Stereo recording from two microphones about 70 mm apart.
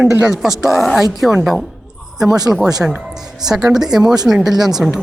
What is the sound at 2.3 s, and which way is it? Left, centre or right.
Speech, right.